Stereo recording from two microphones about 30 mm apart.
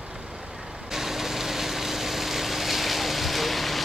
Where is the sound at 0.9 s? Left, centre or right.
Centre.